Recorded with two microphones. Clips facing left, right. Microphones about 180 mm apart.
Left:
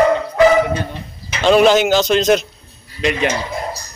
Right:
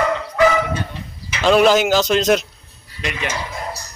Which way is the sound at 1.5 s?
5° right (ahead or behind).